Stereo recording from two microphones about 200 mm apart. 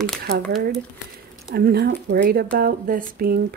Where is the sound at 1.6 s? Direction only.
50° right (ahead or behind).